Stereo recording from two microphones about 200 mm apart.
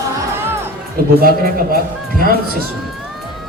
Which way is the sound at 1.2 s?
45° right (ahead or behind).